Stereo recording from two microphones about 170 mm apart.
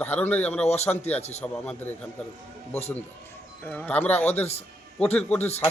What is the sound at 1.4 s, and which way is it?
A man's voice, 10° left (ahead or behind).